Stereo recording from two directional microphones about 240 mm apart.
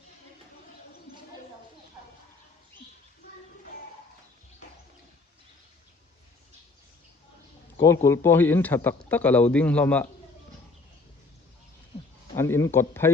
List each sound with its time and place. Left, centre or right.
7.8 s a man's voice: centre
12.4 s speech: centre